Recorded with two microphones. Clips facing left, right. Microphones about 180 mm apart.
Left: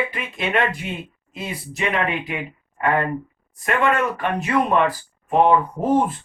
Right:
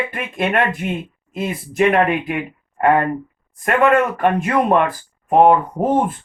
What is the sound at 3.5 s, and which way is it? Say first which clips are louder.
Speech: right 5 dB; 50° right (ahead or behind).